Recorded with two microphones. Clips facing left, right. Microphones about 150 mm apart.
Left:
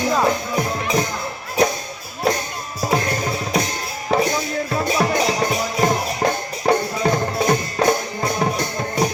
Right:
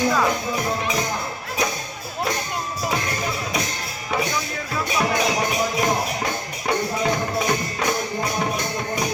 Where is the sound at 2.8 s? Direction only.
40° left (ahead or behind).